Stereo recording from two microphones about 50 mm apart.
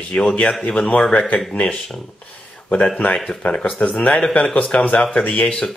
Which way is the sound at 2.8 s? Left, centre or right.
Centre.